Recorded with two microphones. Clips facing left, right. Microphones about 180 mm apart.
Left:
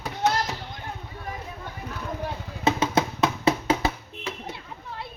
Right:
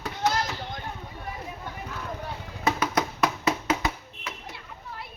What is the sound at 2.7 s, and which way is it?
Music, 25° left (ahead or behind).